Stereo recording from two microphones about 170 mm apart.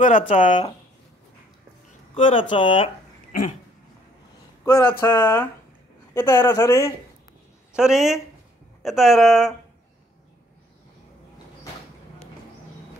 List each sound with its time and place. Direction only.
0.3 s speech: 50° left (ahead or behind)
2.1 s speech: 30° left (ahead or behind)
3.3 s a sound: 50° left (ahead or behind)
4.6 s speech: 20° left (ahead or behind)
7.7 s speech: 5° right (ahead or behind)